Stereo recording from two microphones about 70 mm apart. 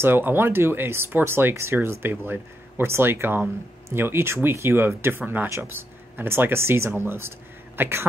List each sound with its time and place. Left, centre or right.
0.0 s speech: right